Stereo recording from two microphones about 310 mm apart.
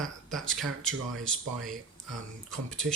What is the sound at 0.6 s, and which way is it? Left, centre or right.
Speech, right.